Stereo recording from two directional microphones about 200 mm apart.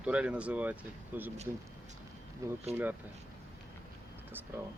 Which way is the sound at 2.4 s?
15° right (ahead or behind).